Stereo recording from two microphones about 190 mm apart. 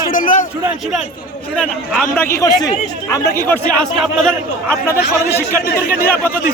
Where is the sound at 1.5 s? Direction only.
5° left (ahead or behind).